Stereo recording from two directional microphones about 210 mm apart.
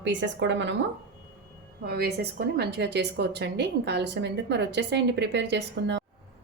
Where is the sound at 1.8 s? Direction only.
50° right (ahead or behind).